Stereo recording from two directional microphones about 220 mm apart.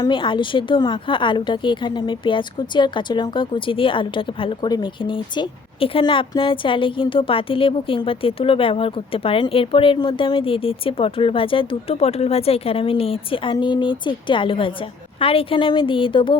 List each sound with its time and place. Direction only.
0.0 s a woman's voice: 20° left (ahead or behind)